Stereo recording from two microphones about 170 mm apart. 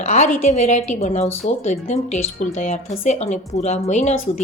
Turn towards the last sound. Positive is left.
turn(degrees=40)  # may be behind; listen again after turning